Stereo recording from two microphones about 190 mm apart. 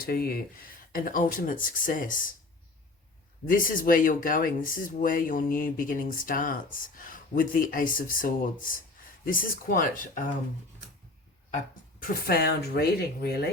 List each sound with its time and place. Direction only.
0.0 s speech: 50° left (ahead or behind)
3.4 s speech: 45° left (ahead or behind)
12.0 s speech: 55° left (ahead or behind)